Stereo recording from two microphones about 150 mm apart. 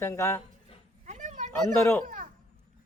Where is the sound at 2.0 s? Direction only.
65° right (ahead or behind).